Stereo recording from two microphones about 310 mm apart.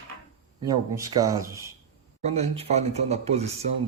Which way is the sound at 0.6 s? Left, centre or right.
Centre.